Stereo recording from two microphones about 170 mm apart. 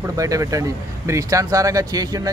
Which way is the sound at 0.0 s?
20° right (ahead or behind).